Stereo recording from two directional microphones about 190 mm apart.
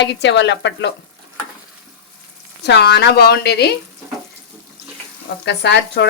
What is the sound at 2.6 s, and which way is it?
Speech, 60° left (ahead or behind).